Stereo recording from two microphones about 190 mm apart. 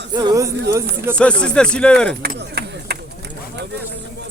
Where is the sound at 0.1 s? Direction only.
20° right (ahead or behind).